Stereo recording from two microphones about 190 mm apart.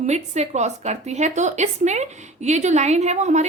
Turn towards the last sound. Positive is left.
turn(degrees=-35)  # may be behind; listen again after turning